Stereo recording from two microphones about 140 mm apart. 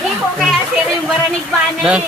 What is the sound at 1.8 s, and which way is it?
Speech, 5° right (ahead or behind).